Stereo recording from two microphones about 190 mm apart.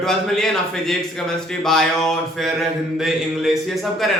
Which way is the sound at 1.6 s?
Centre (ahead or behind).